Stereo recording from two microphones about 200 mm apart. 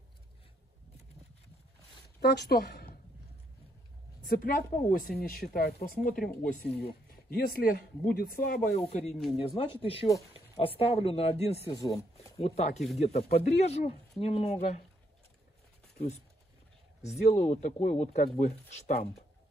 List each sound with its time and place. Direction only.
2.1 s speech: 55° left (ahead or behind)
4.3 s speech: 45° left (ahead or behind)
8.7 s speech: 35° left (ahead or behind)
9.1 s speech: centre (ahead or behind)
9.4 s speech: 25° left (ahead or behind)
11.7 s speech: 15° left (ahead or behind)
12.4 s speech: 35° left (ahead or behind)
12.7 s speech: centre (ahead or behind)
13.0 s speech: 35° left (ahead or behind)
17.3 s speech: 40° left (ahead or behind)